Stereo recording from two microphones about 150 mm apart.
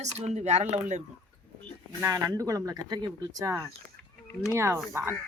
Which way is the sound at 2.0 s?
20° right (ahead or behind).